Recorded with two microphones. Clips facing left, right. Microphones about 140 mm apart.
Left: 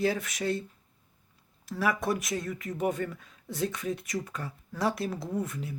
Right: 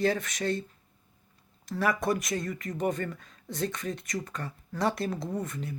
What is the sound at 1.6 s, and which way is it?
Speech, 5° left (ahead or behind).